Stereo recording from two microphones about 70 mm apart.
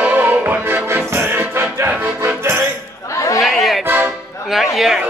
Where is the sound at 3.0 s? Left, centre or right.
Left.